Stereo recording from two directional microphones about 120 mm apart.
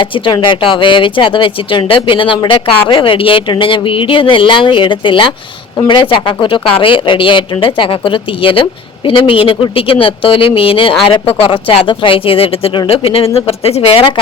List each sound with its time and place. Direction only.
0.0 s speech: 40° left (ahead or behind)